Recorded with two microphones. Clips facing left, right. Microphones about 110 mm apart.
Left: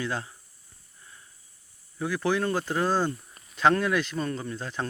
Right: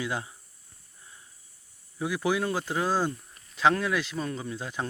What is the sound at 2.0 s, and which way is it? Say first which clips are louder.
Speech: left 1 dB; 10° right (ahead or behind).